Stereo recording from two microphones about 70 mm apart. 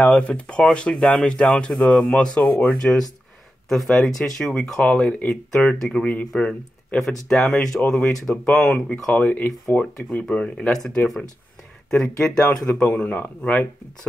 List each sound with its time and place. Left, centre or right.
0.0 s speech: centre
2.4 s speech: left
2.7 s speech: centre
7.0 s speech: centre; by 9.8 s left
10.2 s speech: centre
11.9 s speech: centre
12.8 s speech: left